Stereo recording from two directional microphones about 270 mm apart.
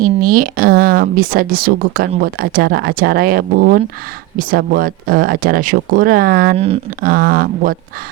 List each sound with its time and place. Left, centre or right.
0.0 s speech: right